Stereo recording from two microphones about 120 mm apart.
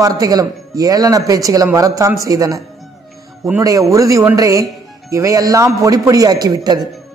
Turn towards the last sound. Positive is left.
turn(degrees=-35)  # may be behind; listen again after turning